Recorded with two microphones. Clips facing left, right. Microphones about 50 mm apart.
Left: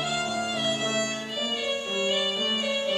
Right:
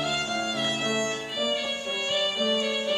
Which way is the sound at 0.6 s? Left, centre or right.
Centre.